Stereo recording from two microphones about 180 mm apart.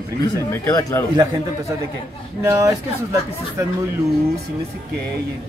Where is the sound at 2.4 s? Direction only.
15° right (ahead or behind).